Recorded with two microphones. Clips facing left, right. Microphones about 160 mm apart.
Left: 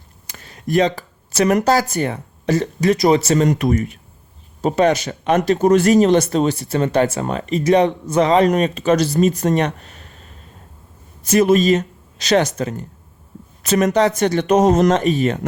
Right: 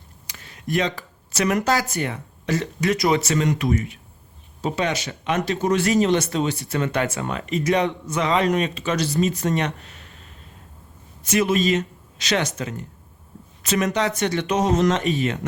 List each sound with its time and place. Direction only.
0.3 s speech: 40° left (ahead or behind)